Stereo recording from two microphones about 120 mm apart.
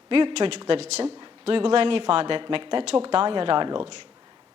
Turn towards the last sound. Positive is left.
turn(degrees=-45)  # may be behind; listen again after turning